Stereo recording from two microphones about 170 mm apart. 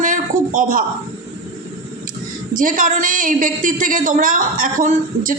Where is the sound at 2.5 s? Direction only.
50° right (ahead or behind).